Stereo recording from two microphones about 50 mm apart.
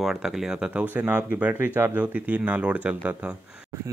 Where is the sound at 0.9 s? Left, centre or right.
Right.